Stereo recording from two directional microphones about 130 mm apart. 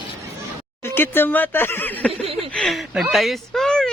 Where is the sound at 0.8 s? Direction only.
20° left (ahead or behind).